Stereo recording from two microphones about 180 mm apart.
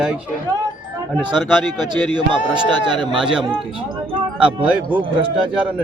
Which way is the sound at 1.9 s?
25° right (ahead or behind).